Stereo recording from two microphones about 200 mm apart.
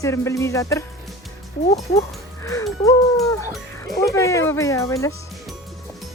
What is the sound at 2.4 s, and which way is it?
Music, 15° left (ahead or behind).